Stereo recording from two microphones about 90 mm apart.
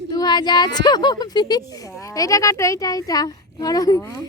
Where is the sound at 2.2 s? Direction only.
40° left (ahead or behind).